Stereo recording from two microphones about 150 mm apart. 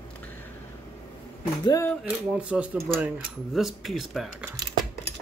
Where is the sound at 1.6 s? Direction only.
25° left (ahead or behind).